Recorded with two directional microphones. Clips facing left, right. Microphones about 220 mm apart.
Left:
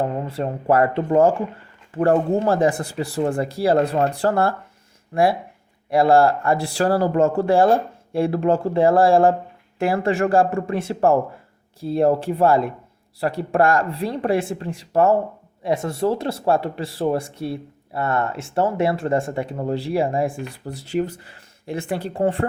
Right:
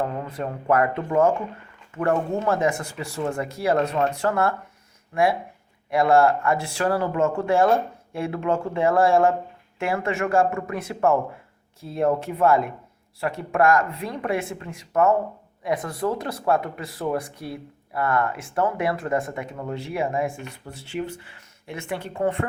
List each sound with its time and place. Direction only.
0.0 s speech: 30° left (ahead or behind)